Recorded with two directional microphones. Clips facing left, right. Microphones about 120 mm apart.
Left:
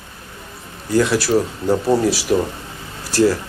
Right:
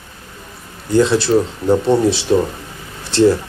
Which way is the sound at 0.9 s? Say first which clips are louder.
Right 3 dB; 25° right (ahead or behind).